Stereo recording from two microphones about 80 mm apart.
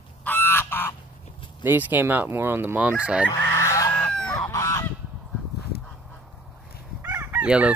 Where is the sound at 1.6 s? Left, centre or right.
Right.